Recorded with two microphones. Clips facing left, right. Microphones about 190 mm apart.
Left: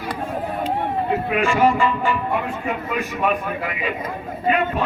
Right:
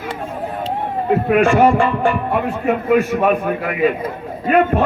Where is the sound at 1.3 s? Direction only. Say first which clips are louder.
Right 6 dB; 50° right (ahead or behind).